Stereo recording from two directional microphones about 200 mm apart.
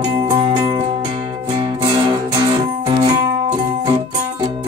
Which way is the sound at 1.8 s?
20° right (ahead or behind).